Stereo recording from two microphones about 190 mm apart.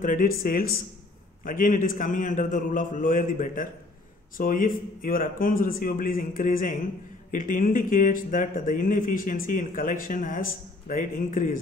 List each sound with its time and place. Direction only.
0.0 s speech: 45° left (ahead or behind)